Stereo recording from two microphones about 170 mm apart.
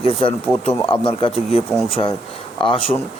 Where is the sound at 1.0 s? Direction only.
30° left (ahead or behind).